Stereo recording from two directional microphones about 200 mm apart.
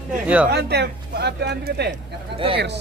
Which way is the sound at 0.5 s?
55° right (ahead or behind).